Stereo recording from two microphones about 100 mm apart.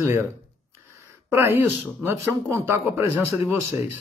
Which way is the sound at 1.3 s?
20° right (ahead or behind).